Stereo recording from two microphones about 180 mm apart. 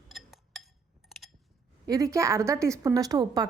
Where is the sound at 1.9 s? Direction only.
15° right (ahead or behind).